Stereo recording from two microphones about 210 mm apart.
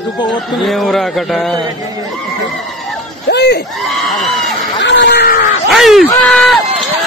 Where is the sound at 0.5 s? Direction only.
Centre (ahead or behind).